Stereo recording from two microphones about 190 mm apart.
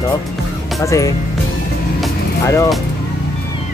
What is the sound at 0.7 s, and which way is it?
Speech, 15° left (ahead or behind).